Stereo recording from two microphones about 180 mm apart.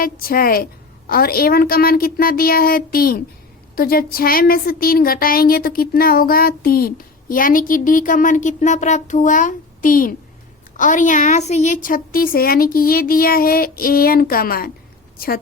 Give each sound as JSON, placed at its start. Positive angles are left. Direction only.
{"t": 0.0, "sound": "a woman's voice", "side_deg": 55}